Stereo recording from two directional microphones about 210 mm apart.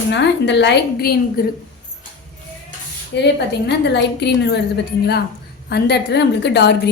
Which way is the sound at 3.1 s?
50° left (ahead or behind).